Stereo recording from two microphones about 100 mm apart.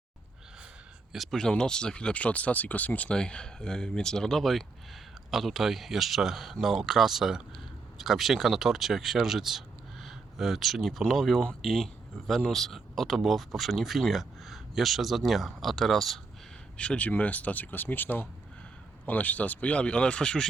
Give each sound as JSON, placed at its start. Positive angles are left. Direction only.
{"t": 1.1, "sound": "speech", "side_deg": 0}